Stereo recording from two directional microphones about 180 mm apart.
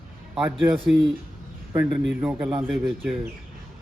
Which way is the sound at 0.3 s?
5° right (ahead or behind).